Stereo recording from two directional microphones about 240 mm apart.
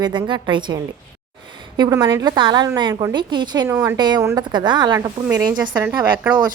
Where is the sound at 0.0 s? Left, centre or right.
Centre.